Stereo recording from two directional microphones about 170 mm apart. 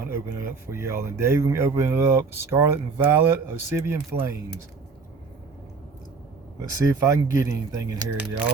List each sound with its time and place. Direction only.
0.0 s speech: 15° right (ahead or behind)
6.6 s speech: 15° right (ahead or behind)